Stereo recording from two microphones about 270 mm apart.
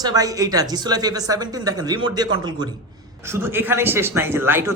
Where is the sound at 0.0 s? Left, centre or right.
Centre.